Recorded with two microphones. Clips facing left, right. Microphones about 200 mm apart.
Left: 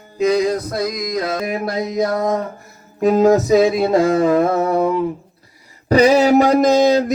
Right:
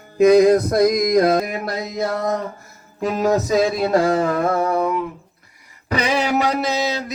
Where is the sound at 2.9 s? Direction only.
20° left (ahead or behind).